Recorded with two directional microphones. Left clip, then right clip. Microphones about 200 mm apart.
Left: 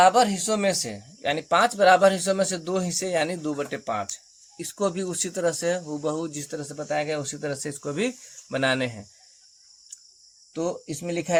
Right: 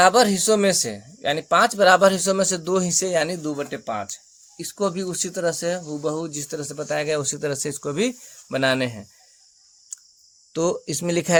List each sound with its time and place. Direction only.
0.0 s speech: 45° right (ahead or behind); by 9.0 s 25° right (ahead or behind)
10.5 s speech: 50° right (ahead or behind)